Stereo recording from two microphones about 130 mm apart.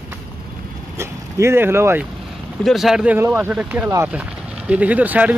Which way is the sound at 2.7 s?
Centre (ahead or behind).